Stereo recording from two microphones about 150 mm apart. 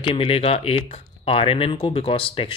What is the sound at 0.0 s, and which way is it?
Speech, 40° left (ahead or behind).